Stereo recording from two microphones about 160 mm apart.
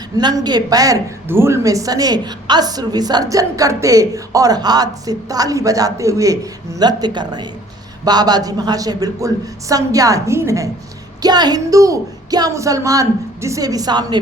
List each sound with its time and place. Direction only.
0.2 s a woman's voice: 25° right (ahead or behind)